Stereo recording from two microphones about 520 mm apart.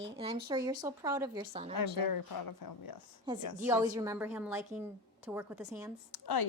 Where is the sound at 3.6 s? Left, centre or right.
Centre.